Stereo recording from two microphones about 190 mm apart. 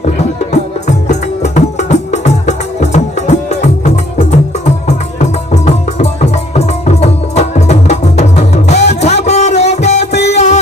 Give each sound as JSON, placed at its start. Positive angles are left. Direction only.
{"t": 0.2, "sound": "music", "side_deg": 35}